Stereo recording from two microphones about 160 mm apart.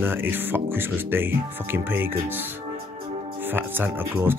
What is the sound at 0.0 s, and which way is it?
Speech, 15° right (ahead or behind).